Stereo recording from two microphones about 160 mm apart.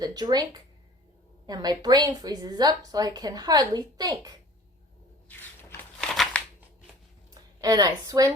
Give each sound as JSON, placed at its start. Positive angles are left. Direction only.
{"t": 0.0, "sound": "a woman's voice", "side_deg": -25}
{"t": 5.3, "sound": "a sound", "side_deg": 10}
{"t": 7.6, "sound": "a woman's voice", "side_deg": -25}